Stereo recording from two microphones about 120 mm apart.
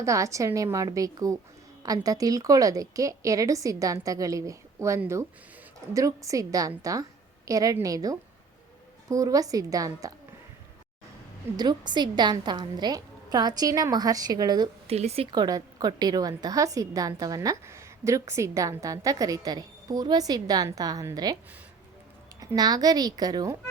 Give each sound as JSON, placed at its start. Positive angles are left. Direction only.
{"t": 0.0, "sound": "a woman's voice", "side_deg": -25}
{"t": 11.5, "sound": "a woman's voice", "side_deg": -35}
{"t": 14.8, "sound": "speech", "side_deg": -60}
{"t": 15.3, "sound": "a woman's voice", "side_deg": -35}
{"t": 22.4, "sound": "a woman's voice", "side_deg": -30}